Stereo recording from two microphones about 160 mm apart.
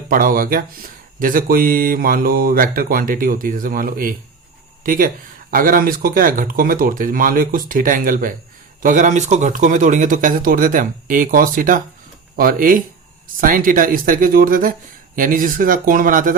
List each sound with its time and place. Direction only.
0.1 s speech: 60° right (ahead or behind)